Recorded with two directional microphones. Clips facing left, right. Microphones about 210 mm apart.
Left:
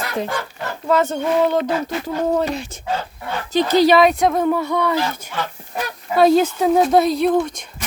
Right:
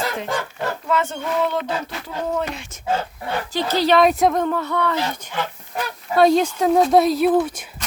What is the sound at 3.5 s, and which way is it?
Speech, 15° left (ahead or behind).